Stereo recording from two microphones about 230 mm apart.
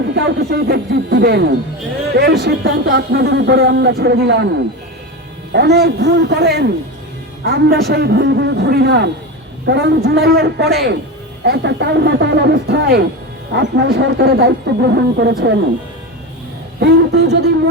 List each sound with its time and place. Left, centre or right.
0.1 s speech: right
5.5 s speech: right
16.8 s speech: right